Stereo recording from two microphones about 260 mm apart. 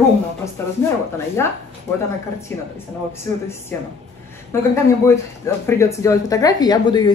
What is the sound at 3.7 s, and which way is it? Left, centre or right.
A woman's voice, centre.